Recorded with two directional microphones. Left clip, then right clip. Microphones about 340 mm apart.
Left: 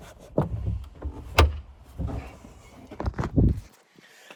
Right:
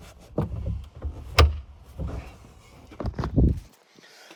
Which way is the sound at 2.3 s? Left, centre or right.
Centre.